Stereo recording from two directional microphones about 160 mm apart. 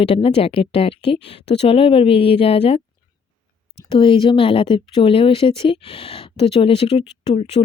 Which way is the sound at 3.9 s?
35° left (ahead or behind).